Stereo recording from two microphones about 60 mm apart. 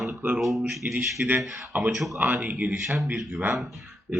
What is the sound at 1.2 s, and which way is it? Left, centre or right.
Speech, right.